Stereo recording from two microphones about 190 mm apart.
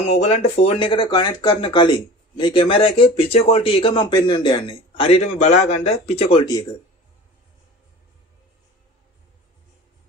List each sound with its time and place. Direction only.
0.0 s speech: 35° left (ahead or behind)